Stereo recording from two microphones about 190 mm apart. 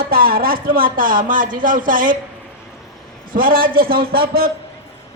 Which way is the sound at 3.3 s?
50° right (ahead or behind).